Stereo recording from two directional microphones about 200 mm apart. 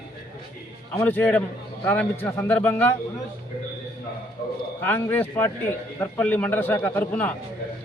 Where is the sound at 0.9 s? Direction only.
10° left (ahead or behind).